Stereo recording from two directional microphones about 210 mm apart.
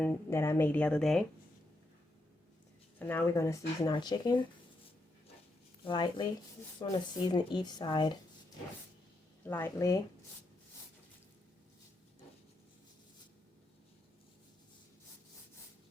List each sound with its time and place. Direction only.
0.0 s speech: 10° left (ahead or behind)
3.0 s speech: 10° left (ahead or behind)
5.8 s speech: 20° left (ahead or behind)
9.5 s speech: 10° left (ahead or behind)